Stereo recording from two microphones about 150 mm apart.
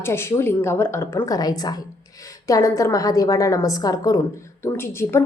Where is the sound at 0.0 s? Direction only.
15° left (ahead or behind).